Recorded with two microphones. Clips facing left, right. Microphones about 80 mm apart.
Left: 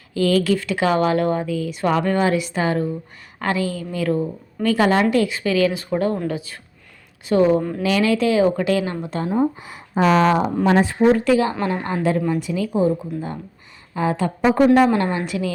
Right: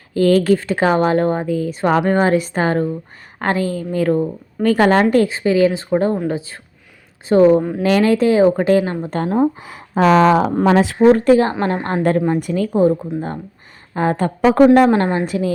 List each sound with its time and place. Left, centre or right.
0.1 s speech: right
5.1 s a woman's voice: right
9.0 s speech: right
10.8 s speech: right
11.1 s speech: right
14.5 s speech: right
14.8 s speech: right